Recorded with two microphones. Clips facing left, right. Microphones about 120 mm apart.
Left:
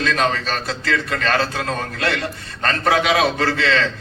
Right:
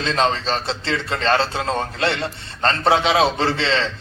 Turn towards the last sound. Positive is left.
turn(degrees=-25)  # may be behind; listen again after turning